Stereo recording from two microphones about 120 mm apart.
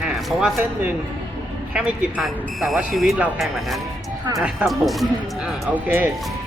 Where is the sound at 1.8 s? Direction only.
5° right (ahead or behind).